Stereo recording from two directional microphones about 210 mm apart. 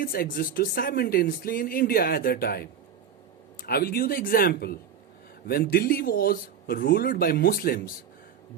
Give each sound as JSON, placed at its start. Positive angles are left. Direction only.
{"t": 0.0, "sound": "speech", "side_deg": 45}